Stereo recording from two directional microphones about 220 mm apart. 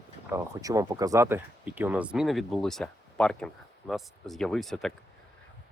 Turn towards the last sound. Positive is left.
turn(degrees=0)  # may be behind; listen again after turning